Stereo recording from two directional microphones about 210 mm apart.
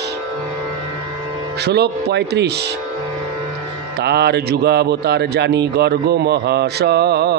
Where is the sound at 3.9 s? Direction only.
50° right (ahead or behind).